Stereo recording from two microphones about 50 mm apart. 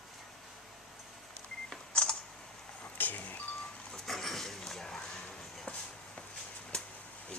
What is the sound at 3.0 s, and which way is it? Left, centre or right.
Reversing beeps, left.